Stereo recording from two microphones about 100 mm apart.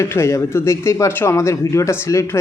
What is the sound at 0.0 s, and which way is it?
Speech, 25° left (ahead or behind).